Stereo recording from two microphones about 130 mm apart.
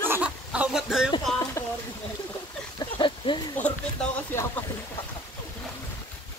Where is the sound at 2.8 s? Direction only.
40° left (ahead or behind).